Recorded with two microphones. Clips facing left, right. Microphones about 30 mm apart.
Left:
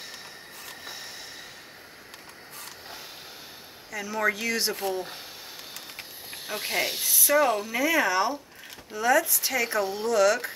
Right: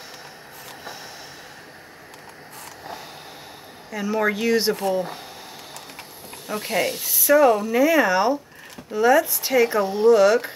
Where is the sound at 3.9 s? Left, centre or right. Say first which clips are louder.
Right 4 dB; right.